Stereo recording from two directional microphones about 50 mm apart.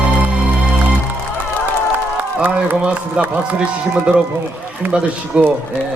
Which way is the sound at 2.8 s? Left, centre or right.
Centre.